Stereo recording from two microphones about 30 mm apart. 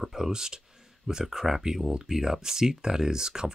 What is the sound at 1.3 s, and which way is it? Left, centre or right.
Speech, centre.